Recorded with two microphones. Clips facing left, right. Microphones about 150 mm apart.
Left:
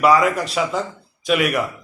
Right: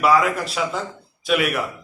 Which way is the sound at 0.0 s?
Centre (ahead or behind).